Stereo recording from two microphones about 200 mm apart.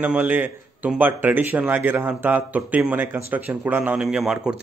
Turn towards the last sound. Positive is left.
turn(degrees=-5)  # may be behind; listen again after turning